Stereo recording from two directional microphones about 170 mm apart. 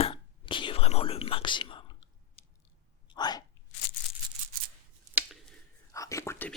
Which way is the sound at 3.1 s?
25° left (ahead or behind).